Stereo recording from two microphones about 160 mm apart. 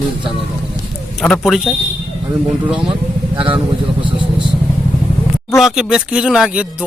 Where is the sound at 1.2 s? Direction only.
Centre (ahead or behind).